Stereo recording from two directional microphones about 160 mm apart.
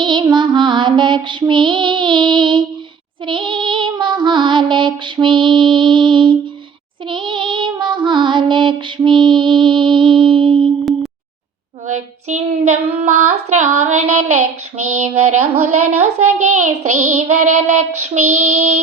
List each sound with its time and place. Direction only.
0.0 s music: 30° right (ahead or behind)
3.2 s female singing: 30° right (ahead or behind)
11.9 s child singing: 50° right (ahead or behind)